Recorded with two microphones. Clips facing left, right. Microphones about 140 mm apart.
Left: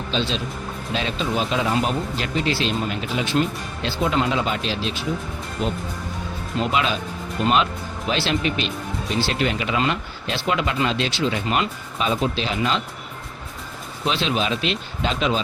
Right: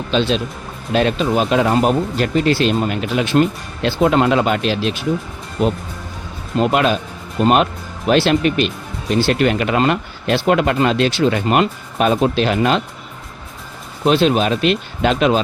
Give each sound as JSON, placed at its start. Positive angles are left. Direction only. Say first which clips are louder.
{"t": 0.1, "sound": "speech", "louder": "right 8 dB", "side_deg": -60}
{"t": 14.0, "sound": "speech", "louder": "right 9 dB", "side_deg": -50}